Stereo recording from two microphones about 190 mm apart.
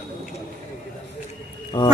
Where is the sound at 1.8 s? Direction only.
25° left (ahead or behind).